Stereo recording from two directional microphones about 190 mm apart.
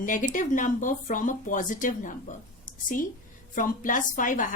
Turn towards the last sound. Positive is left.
turn(degrees=45)  # may be behind; listen again after turning